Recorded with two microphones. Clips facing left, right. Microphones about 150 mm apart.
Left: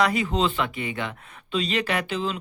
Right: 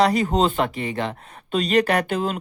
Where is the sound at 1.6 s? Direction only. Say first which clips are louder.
Right 8 dB; 50° right (ahead or behind).